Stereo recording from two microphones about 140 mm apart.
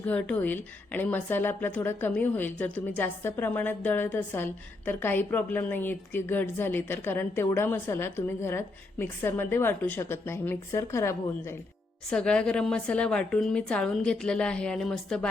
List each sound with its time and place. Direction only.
0.0 s a woman's voice: 10° left (ahead or behind)
12.1 s a woman's voice: 5° left (ahead or behind)